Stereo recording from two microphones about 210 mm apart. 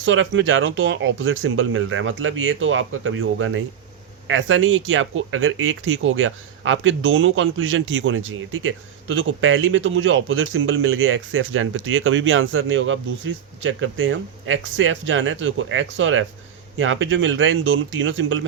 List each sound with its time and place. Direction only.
0.0 s speech: 65° right (ahead or behind)